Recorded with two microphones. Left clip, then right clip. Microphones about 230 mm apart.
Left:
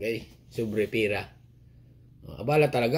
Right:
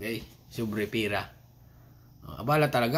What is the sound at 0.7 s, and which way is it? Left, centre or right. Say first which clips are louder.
Speech: left 3 dB; centre.